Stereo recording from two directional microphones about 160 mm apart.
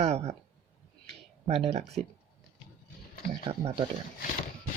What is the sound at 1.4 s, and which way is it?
Speech, 40° right (ahead or behind).